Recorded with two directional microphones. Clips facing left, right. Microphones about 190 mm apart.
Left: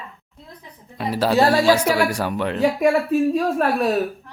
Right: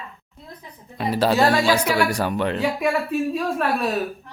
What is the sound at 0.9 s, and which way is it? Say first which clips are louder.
A woman's voice: left 1 dB; 5° left (ahead or behind).